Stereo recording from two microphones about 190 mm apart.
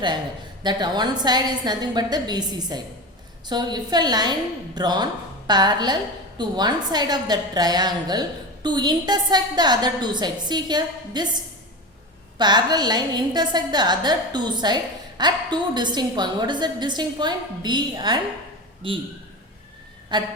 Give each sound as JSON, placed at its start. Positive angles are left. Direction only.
{"t": 0.6, "sound": "a woman's voice", "side_deg": -20}
{"t": 12.4, "sound": "a woman's voice", "side_deg": -20}
{"t": 20.1, "sound": "a woman's voice", "side_deg": -25}